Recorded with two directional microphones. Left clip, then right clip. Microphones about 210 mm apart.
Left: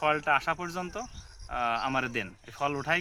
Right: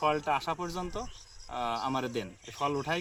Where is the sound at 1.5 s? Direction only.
Centre (ahead or behind).